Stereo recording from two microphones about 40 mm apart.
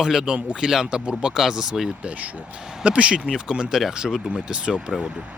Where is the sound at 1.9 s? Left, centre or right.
Right.